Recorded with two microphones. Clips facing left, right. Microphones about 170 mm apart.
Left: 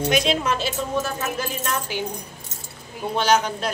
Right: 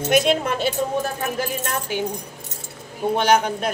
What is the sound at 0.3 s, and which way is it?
Speech, 55° right (ahead or behind).